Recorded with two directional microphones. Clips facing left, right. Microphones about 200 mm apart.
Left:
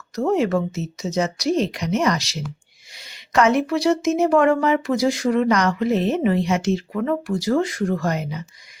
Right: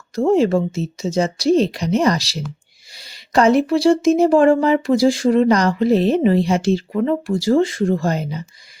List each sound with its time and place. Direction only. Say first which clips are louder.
0.2 s speech: right 4 dB; 30° right (ahead or behind)